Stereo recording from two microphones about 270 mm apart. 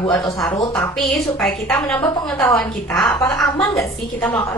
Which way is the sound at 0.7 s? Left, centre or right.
Centre.